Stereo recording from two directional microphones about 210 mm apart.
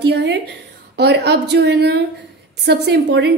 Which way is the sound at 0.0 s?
50° right (ahead or behind).